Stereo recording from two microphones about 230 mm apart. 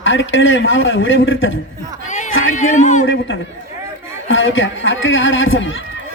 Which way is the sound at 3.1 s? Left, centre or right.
Left.